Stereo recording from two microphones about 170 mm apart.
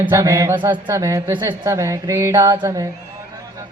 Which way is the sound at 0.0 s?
15° right (ahead or behind).